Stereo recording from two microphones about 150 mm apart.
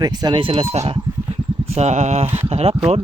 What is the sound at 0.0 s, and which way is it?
Speech, 30° right (ahead or behind).